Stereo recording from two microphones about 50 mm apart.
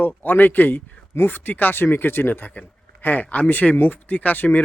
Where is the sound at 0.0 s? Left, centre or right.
Left.